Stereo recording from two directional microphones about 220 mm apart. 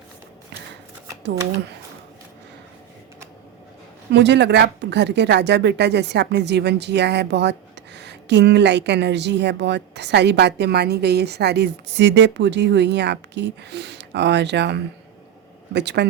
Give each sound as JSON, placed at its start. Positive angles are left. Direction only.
{"t": 4.1, "sound": "a woman's voice", "side_deg": -50}